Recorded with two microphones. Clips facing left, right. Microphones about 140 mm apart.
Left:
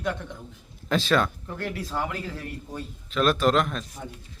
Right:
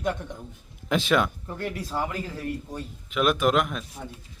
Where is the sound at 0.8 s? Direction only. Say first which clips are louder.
Even; 15° right (ahead or behind).